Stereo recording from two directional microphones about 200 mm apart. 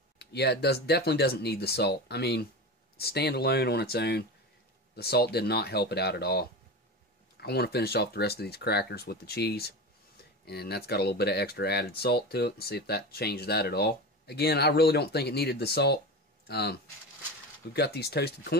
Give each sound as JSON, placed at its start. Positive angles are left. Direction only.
{"t": 0.2, "sound": "speech", "side_deg": 55}